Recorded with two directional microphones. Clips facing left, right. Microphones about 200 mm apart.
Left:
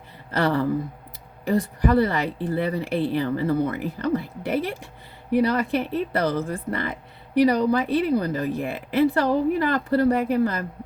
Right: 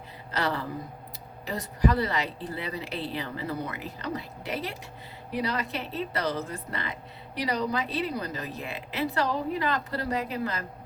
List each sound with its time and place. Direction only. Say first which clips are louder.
0.3 s a woman's voice: left 8 dB; 55° left (ahead or behind)